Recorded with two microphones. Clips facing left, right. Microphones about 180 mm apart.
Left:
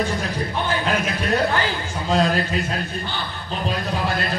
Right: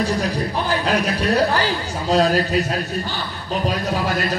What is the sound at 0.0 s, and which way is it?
A man's voice, 35° right (ahead or behind).